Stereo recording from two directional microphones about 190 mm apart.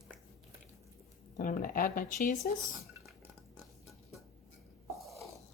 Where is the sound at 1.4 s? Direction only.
45° left (ahead or behind).